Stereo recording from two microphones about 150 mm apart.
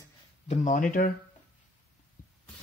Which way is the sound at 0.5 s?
55° left (ahead or behind).